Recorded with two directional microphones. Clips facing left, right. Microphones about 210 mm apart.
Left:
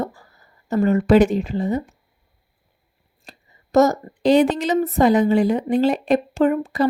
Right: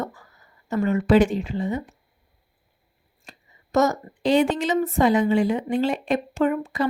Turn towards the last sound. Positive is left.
turn(degrees=35)  # may be behind; listen again after turning